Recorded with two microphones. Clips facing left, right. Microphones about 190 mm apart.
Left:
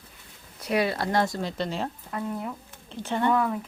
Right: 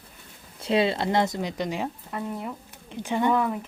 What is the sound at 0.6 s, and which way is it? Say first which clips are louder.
Speech: right 2 dB; 25° right (ahead or behind).